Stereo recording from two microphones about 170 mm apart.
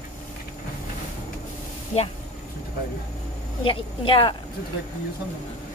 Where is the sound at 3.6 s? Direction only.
30° left (ahead or behind).